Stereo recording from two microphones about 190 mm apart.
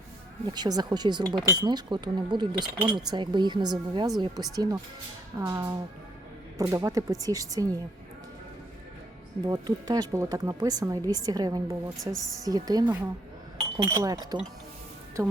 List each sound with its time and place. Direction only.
0.4 s speech: 20° right (ahead or behind)
9.5 s speech: 20° right (ahead or behind)